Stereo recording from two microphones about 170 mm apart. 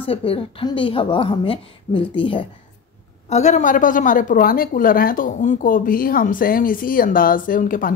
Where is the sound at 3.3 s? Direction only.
45° left (ahead or behind).